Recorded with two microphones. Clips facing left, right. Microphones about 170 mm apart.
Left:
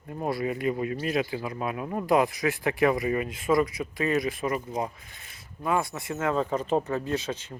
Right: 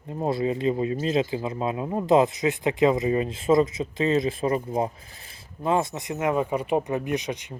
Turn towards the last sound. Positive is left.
turn(degrees=-15)  # may be behind; listen again after turning